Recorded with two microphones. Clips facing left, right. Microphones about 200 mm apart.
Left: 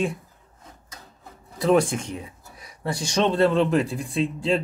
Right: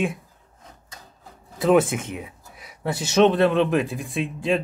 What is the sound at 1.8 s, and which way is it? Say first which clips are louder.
Speech: right 2 dB; 5° right (ahead or behind).